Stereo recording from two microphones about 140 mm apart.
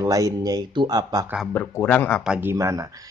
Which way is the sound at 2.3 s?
15° right (ahead or behind).